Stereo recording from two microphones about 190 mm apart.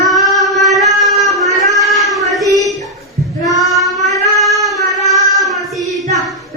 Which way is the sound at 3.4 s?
Centre (ahead or behind).